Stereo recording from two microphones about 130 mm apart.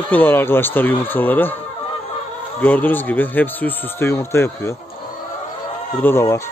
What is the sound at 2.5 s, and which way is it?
Speech, 10° left (ahead or behind).